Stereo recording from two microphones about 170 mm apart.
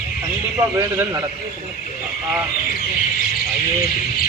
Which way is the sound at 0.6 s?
20° right (ahead or behind).